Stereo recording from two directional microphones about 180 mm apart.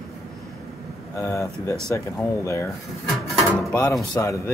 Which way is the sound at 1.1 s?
15° left (ahead or behind).